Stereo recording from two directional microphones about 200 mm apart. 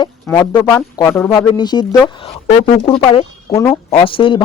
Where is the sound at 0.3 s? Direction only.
15° left (ahead or behind).